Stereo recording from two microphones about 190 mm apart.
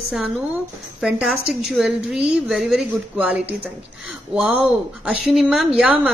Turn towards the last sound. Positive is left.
turn(degrees=-5)  # may be behind; listen again after turning